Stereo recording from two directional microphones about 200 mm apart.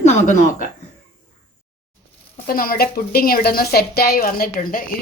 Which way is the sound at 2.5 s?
45° left (ahead or behind).